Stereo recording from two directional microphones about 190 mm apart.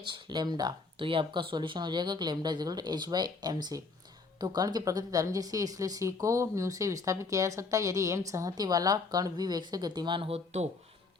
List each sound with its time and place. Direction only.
0.0 s speech: 25° right (ahead or behind)